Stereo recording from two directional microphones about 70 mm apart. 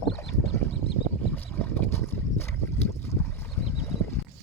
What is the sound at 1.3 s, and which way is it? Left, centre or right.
Boat, left.